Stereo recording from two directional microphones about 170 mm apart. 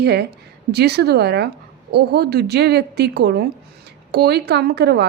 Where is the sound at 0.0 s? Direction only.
75° right (ahead or behind).